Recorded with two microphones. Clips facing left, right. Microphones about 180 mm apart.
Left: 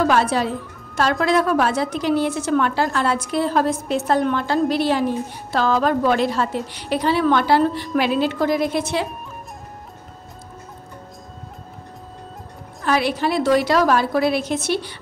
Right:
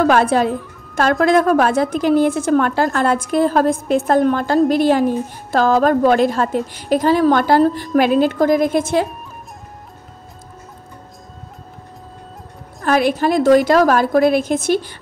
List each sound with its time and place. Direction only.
0.0 s a woman's voice: 55° right (ahead or behind)
12.8 s a woman's voice: 50° right (ahead or behind)